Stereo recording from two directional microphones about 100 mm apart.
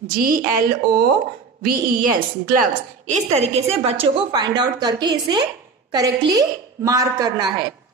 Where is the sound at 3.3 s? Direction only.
90° right; by 4.1 s 75° right (ahead or behind).